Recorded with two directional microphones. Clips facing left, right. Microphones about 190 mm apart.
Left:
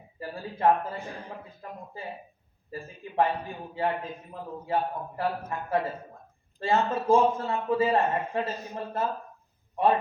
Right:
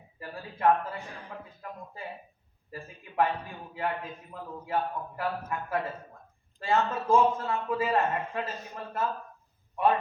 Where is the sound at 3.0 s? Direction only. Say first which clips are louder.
Left 2 dB; 30° left (ahead or behind).